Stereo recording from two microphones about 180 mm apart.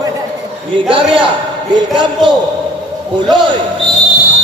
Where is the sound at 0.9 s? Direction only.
30° right (ahead or behind).